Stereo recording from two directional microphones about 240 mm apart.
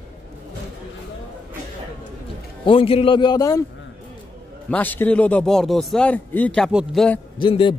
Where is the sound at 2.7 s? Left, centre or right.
Left.